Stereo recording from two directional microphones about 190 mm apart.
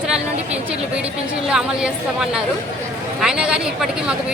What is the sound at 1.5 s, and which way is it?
Speech, 5° right (ahead or behind).